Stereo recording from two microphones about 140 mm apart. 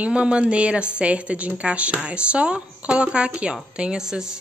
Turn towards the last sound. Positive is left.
turn(degrees=-5)  # may be behind; listen again after turning